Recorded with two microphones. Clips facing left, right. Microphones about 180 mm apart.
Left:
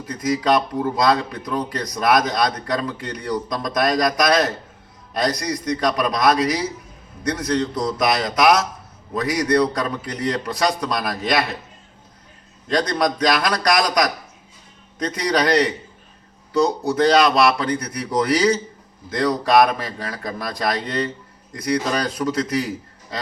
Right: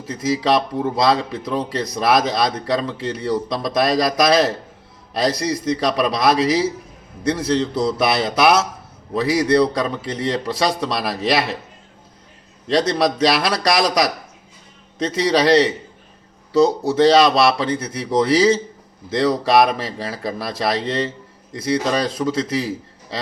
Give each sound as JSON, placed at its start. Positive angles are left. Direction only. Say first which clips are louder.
{"t": 0.0, "sound": "a man's voice", "louder": "right 1 dB", "side_deg": -25}
{"t": 12.6, "sound": "a man's voice", "louder": "right 3 dB", "side_deg": -25}